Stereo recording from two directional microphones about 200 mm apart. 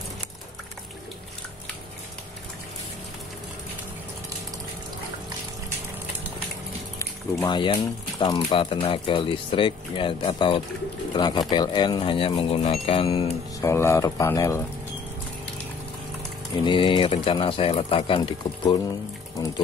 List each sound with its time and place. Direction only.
7.0 s speech: 20° left (ahead or behind)
13.7 s speech: 15° left (ahead or behind)
16.6 s speech: 25° left (ahead or behind)